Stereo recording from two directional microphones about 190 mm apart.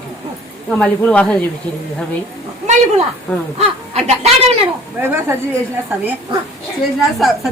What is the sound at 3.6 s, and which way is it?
Speech, 35° right (ahead or behind).